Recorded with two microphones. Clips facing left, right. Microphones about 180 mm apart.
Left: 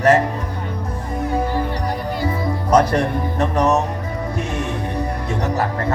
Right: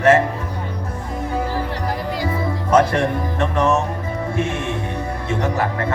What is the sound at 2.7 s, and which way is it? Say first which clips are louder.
Music: even; 40° left (ahead or behind).